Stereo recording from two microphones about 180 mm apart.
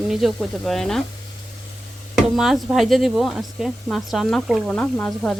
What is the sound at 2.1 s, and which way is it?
Speech, centre (ahead or behind).